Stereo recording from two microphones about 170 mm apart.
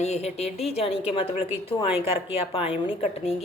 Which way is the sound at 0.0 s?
40° left (ahead or behind).